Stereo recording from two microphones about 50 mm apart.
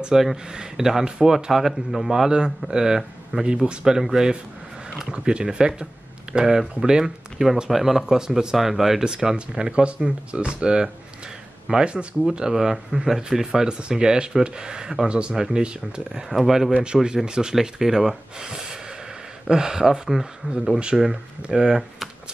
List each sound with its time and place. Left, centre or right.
0.1 s speech: centre
12.3 s speech: centre
16.7 s speech: centre
20.7 s speech: centre